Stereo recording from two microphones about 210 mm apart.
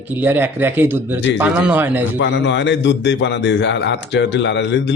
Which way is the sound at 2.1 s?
60° left (ahead or behind).